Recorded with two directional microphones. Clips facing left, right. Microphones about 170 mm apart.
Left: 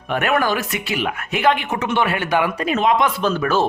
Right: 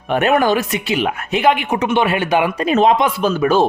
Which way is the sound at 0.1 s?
25° right (ahead or behind).